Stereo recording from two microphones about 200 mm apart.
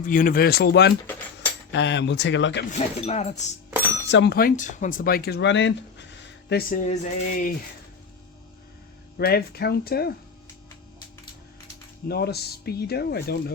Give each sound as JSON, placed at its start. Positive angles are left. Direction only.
{"t": 0.0, "sound": "speech", "side_deg": 45}
{"t": 2.7, "sound": "speech", "side_deg": 35}
{"t": 3.7, "sound": "a sound", "side_deg": -10}
{"t": 4.1, "sound": "speech", "side_deg": 55}
{"t": 6.8, "sound": "speech", "side_deg": 35}
{"t": 9.1, "sound": "speech", "side_deg": 50}
{"t": 12.0, "sound": "speech", "side_deg": 55}